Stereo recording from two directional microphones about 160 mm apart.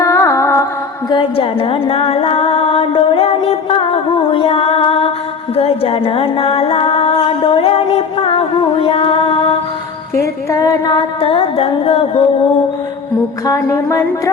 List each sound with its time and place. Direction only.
0.0 s music: 20° left (ahead or behind)
1.1 s music: 35° left (ahead or behind)
10.2 s singing: 20° left (ahead or behind); by 12.2 s 35° left (ahead or behind)
13.5 s music: 20° left (ahead or behind)